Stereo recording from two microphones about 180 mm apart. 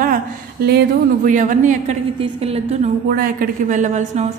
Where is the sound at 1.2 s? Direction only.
45° right (ahead or behind).